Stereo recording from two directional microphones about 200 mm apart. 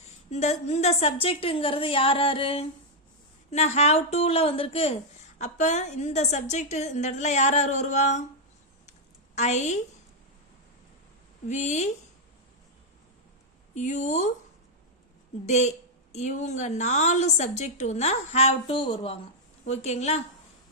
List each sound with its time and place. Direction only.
0.0 s a woman's voice: 35° left (ahead or behind)
8.9 s a sound: 35° left (ahead or behind)
11.4 s a woman's voice: 35° left (ahead or behind)
13.7 s a woman's voice: 35° left (ahead or behind)
15.4 s a woman's voice: 35° left (ahead or behind)